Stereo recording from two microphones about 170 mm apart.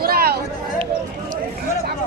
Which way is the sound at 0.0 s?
65° right (ahead or behind).